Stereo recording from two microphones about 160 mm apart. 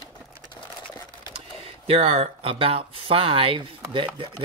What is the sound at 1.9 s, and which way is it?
Speech, 40° right (ahead or behind).